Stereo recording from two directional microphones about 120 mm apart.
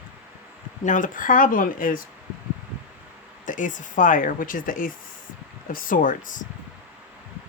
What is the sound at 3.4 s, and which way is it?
Speech, 90° left.